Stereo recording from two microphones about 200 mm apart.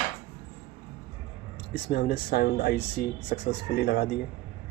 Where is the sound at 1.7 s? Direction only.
50° left (ahead or behind).